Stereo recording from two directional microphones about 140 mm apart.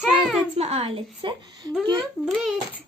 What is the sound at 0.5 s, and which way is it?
Speech, 50° right (ahead or behind).